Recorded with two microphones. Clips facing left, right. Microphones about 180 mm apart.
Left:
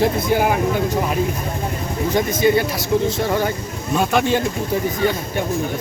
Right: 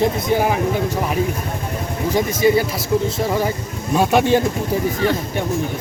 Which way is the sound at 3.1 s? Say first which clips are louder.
Even; 5° right (ahead or behind).